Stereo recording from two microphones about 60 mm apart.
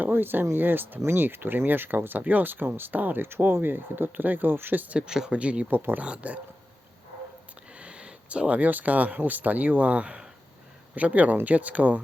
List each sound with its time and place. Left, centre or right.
0.0 s speech: right
4.9 s speech: centre
5.7 s speech: right
7.8 s speech: centre